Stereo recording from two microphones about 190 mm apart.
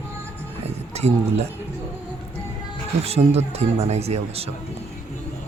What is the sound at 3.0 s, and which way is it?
Speech, 35° right (ahead or behind).